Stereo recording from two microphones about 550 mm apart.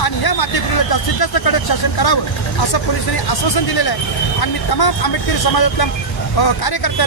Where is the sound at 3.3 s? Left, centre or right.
Left.